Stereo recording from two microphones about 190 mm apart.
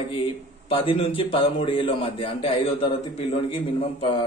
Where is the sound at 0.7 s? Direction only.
30° left (ahead or behind).